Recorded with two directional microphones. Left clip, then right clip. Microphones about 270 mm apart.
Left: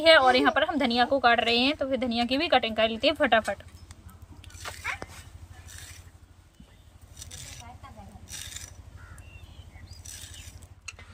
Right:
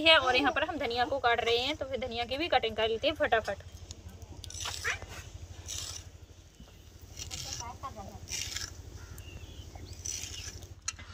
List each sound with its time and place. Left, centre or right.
0.0 s a woman's voice: left